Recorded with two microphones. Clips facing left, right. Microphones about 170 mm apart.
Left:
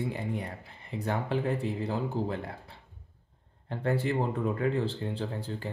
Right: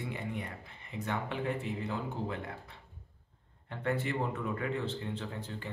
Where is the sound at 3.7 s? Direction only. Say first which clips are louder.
Left 4 dB; 35° left (ahead or behind).